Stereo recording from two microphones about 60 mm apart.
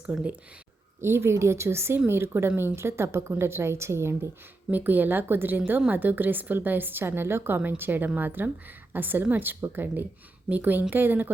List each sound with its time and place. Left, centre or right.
0.0 s speech: centre
1.0 s speech: right
4.7 s a woman's voice: right